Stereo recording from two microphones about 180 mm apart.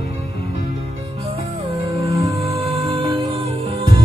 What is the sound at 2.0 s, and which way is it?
Music, 20° right (ahead or behind).